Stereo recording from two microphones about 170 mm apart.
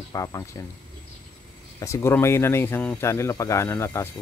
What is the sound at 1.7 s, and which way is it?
Speech, 20° left (ahead or behind).